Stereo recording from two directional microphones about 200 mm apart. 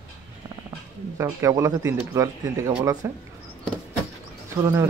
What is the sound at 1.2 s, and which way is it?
Speech, 15° right (ahead or behind).